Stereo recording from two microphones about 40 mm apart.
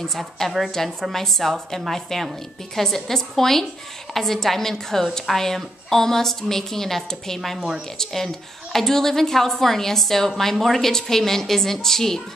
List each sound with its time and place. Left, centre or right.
0.6 s a woman's voice: centre
7.5 s a woman's voice: centre
8.0 s a woman's voice: centre